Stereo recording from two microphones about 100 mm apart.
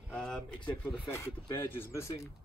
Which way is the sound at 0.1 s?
10° left (ahead or behind).